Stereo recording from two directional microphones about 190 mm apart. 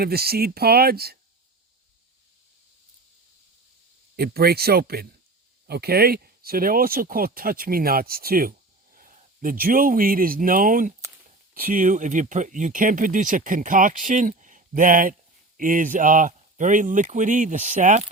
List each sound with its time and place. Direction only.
0.0 s speech: 55° right (ahead or behind)
4.2 s speech: 55° right (ahead or behind)